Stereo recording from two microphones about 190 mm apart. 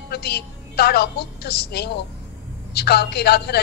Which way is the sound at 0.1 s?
60° left (ahead or behind).